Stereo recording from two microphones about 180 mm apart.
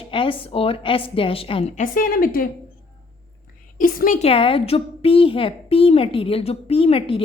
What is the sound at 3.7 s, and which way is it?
Speech, 50° left (ahead or behind).